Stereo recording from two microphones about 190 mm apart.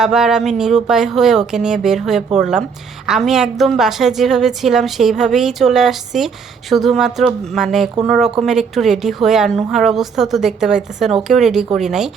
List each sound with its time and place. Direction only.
0.0 s a woman's voice: centre (ahead or behind)